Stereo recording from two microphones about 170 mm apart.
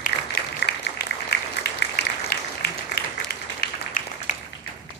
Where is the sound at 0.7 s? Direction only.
70° left (ahead or behind).